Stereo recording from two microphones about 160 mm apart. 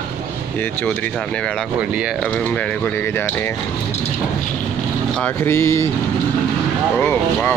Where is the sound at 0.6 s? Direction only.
10° left (ahead or behind).